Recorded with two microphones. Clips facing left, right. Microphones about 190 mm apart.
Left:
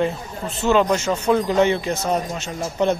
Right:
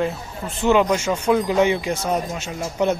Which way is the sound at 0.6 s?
15° right (ahead or behind).